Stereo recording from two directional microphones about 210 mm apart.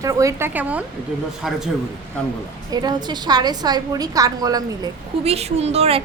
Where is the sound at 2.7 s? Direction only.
20° right (ahead or behind).